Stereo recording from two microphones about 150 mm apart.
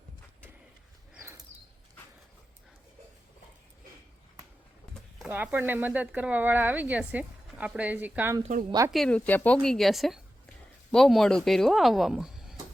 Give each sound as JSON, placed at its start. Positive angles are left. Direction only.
{"t": 1.2, "sound": "a sound", "side_deg": -15}
{"t": 5.2, "sound": "speech", "side_deg": -10}
{"t": 8.9, "sound": "speech", "side_deg": 5}